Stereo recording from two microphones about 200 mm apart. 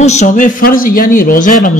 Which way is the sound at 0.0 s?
35° left (ahead or behind).